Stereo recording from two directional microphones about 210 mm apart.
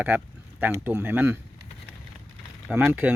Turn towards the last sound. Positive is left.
turn(degrees=-10)  # may be behind; listen again after turning